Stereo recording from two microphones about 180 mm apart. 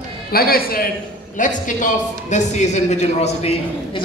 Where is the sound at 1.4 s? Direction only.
45° left (ahead or behind).